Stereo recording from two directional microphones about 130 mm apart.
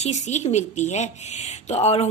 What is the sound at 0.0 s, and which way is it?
Speech, 60° left (ahead or behind).